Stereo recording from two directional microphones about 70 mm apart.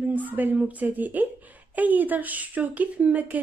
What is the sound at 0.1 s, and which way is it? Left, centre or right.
A woman's voice, right.